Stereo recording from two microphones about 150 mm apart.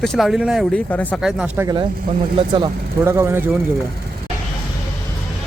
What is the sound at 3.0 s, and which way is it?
Speech, 15° right (ahead or behind).